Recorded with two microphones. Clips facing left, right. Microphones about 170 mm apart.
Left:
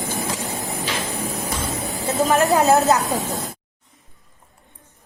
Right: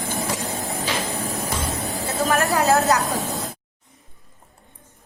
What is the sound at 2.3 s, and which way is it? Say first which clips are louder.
Speech: left 3 dB; 20° left (ahead or behind).